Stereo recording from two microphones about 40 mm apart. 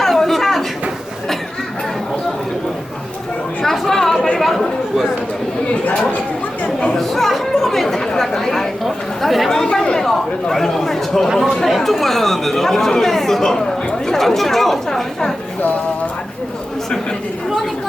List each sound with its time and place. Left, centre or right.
0.0 s a sound: centre
3.6 s chatter: centre
5.6 s chatter: left
6.9 s chatter: centre
10.0 s chatter: centre